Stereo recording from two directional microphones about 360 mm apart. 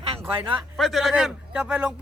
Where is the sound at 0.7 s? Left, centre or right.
Centre.